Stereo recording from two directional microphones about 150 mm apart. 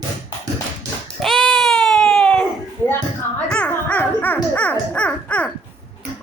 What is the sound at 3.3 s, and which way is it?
Music, 10° left (ahead or behind).